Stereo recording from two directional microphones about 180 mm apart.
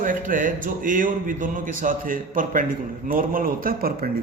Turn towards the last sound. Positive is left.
turn(degrees=-55)  # may be behind; listen again after turning